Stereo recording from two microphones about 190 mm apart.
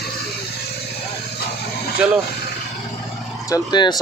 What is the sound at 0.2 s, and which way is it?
Vehicle, 55° left (ahead or behind).